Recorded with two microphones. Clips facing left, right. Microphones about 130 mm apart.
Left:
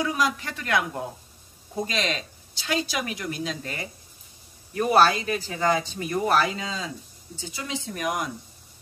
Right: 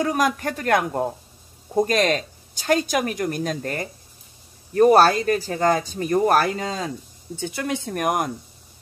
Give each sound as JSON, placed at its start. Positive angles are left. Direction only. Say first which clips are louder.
{"t": 0.0, "sound": "speech", "louder": "right 4 dB", "side_deg": -50}